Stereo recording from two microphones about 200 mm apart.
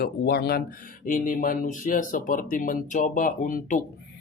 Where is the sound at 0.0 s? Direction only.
50° left (ahead or behind).